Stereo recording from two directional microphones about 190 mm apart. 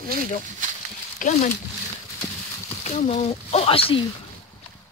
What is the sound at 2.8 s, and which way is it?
Speech, 35° left (ahead or behind).